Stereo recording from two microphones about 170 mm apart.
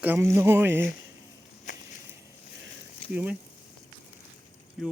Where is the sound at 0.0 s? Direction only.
15° right (ahead or behind).